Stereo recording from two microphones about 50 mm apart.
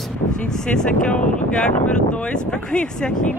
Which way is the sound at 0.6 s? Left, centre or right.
Centre.